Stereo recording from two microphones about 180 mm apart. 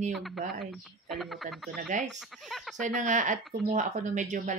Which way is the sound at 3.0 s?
45° right (ahead or behind).